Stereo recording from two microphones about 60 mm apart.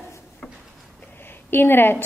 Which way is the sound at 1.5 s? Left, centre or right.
Left.